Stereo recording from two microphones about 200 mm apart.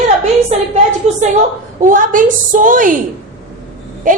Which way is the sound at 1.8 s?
40° right (ahead or behind).